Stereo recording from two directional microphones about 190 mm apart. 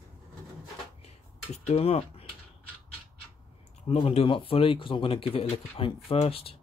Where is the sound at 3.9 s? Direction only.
30° left (ahead or behind).